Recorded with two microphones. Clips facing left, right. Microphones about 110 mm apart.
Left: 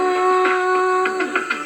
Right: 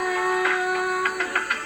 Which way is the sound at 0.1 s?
75° left (ahead or behind).